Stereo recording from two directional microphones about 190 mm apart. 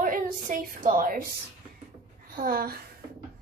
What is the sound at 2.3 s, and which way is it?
Speech, 50° right (ahead or behind).